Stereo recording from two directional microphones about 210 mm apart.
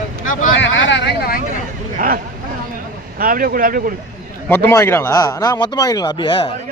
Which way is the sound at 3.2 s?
45° right (ahead or behind).